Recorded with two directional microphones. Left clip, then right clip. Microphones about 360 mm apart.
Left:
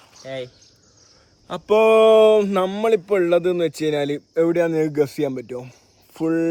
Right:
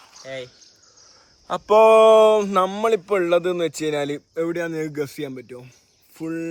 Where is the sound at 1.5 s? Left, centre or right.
Centre.